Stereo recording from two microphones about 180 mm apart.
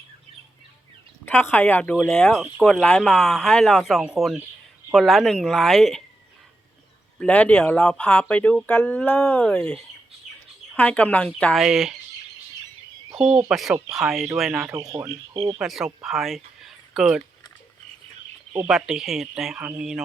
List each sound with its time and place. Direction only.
1.2 s speech: 10° left (ahead or behind)
7.2 s speech: 5° left (ahead or behind)
13.1 s speech: 5° right (ahead or behind)
14.8 s speech: 20° right (ahead or behind)
15.5 s speech: centre (ahead or behind)
18.5 s speech: 5° right (ahead or behind)